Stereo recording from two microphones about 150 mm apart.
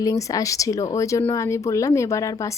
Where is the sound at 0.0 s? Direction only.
20° left (ahead or behind).